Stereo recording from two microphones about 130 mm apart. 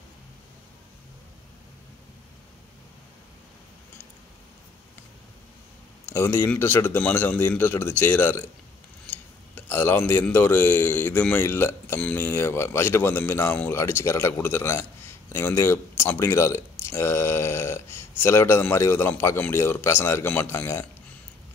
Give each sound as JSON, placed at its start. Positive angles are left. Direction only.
{"t": 6.0, "sound": "speech", "side_deg": 20}